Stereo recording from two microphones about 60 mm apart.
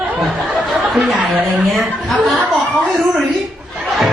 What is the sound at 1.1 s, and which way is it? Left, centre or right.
Chuckle, right.